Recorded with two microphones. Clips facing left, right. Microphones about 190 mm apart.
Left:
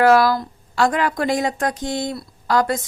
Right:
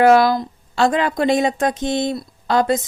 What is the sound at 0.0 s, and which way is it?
A woman's voice, 20° right (ahead or behind).